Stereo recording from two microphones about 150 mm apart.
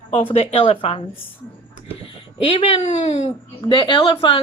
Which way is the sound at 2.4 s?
35° left (ahead or behind).